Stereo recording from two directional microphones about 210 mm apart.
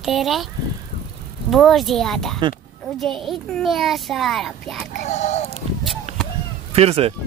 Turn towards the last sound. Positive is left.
turn(degrees=-25)  # may be behind; listen again after turning